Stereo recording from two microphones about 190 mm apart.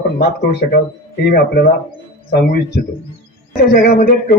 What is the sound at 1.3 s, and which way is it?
Speech, 55° left (ahead or behind).